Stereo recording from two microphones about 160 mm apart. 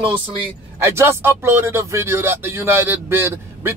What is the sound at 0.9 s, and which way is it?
Speech, 15° right (ahead or behind).